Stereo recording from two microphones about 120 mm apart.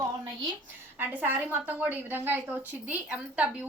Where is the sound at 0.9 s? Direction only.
15° right (ahead or behind).